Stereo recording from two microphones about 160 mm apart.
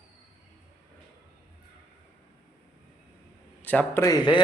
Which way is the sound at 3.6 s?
10° left (ahead or behind).